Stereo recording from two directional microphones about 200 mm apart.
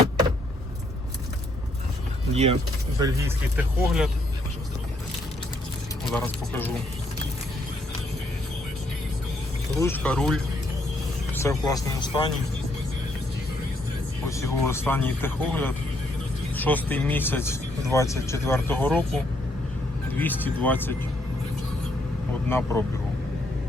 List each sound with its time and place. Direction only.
2.3 s speech: 30° right (ahead or behind)
3.0 s speech: 10° right (ahead or behind)
6.1 s speech: 10° left (ahead or behind)
9.7 s speech: 10° left (ahead or behind)
11.3 s speech: 15° left (ahead or behind)
14.3 s speech: 15° left (ahead or behind)
20.1 s speech: 10° left (ahead or behind)
22.4 s speech: 10° left (ahead or behind)